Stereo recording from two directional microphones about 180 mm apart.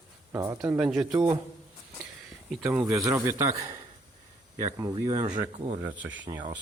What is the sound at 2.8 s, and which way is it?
A man's voice, 20° right (ahead or behind).